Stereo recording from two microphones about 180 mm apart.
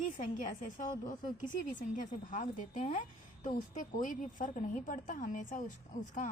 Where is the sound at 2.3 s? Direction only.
45° left (ahead or behind).